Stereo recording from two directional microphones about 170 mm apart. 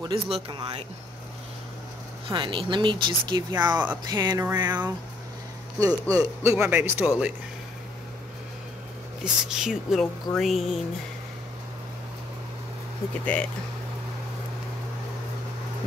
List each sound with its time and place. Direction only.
0.0 s speech: 30° right (ahead or behind)
2.2 s speech: 30° right (ahead or behind)
5.8 s speech: 20° right (ahead or behind)
9.2 s speech: 5° right (ahead or behind)
13.2 s speech: 5° left (ahead or behind)